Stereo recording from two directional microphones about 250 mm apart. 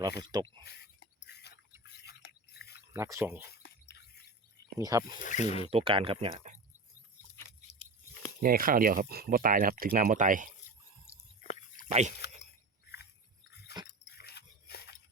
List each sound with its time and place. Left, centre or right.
0.2 s speech: centre
0.6 s a sound: left
2.9 s speech: centre
3.4 s chirp: left
4.8 s speech: centre
5.2 s speech: left
5.7 s speech: right
8.4 s speech: right
11.9 s speech: right
13.7 s dog: left
14.2 s a sound: left